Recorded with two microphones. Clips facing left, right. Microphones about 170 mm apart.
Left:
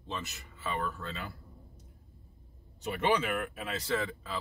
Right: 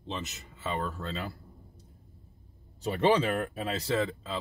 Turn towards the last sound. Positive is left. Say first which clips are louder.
# right 4 dB
turn(degrees=-25)  # may be behind; listen again after turning